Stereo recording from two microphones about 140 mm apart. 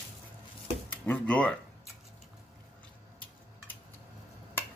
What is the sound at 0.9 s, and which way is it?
Speech, 10° left (ahead or behind).